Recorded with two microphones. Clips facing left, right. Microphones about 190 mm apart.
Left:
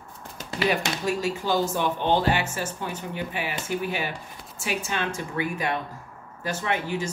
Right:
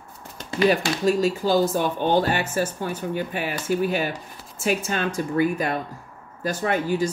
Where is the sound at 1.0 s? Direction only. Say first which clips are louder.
Right 8 dB; 40° right (ahead or behind).